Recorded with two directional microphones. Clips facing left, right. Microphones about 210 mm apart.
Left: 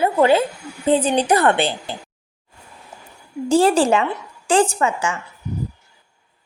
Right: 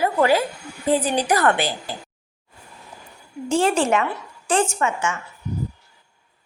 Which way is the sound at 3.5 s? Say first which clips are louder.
Left 4 dB; 35° left (ahead or behind).